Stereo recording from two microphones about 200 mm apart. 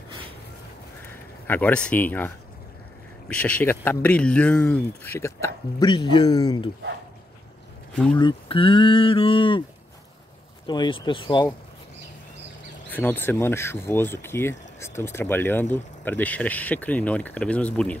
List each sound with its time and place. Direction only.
1.5 s speech: 5° left (ahead or behind)
7.9 s speech: 5° left (ahead or behind)
8.2 s speech: 25° left (ahead or behind)
10.7 s speech: 25° left (ahead or behind)
12.9 s speech: 10° left (ahead or behind)